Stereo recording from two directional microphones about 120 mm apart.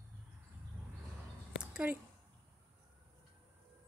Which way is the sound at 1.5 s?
5° right (ahead or behind).